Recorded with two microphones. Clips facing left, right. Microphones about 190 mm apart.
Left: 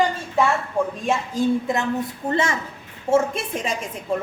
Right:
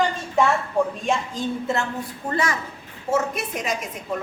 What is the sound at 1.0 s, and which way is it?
A woman's voice, 5° left (ahead or behind).